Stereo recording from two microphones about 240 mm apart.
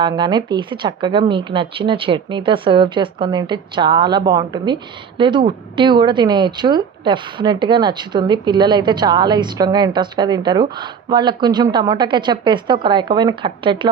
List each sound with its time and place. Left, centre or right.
0.0 s speech: centre